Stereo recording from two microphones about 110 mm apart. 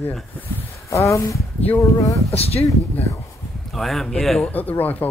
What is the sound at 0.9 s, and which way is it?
Speech, 25° left (ahead or behind).